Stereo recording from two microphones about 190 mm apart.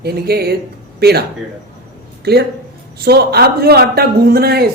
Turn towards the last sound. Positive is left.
turn(degrees=-55)  # may be behind; listen again after turning